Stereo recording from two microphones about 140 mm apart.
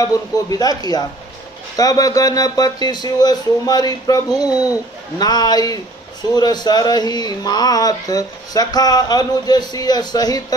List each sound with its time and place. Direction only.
0.0 s speech: 25° left (ahead or behind)